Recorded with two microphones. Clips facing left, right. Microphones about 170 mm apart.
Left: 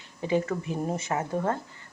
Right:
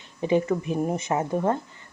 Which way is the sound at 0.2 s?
20° right (ahead or behind).